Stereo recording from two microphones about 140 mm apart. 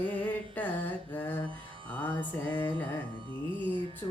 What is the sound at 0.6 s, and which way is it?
Mantra, 15° left (ahead or behind).